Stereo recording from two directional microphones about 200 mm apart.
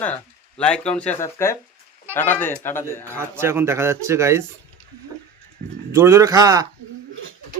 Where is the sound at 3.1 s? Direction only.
10° right (ahead or behind).